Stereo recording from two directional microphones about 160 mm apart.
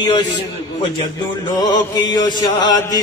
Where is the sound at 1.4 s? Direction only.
25° left (ahead or behind).